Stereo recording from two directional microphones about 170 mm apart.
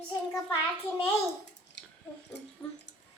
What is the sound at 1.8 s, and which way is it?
Chewing, 90° left.